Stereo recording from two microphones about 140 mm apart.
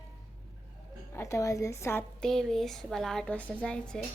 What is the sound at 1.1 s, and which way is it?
Speech, 20° left (ahead or behind).